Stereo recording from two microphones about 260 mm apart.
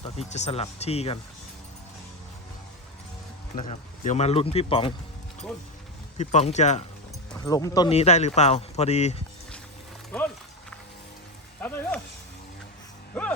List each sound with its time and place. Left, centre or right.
0.0 s speech: left
3.5 s speech: left
6.1 s speech: left
7.3 s speech: centre
11.6 s a sound: centre